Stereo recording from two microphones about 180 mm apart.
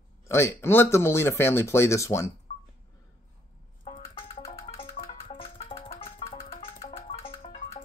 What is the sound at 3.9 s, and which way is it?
Music, 30° left (ahead or behind).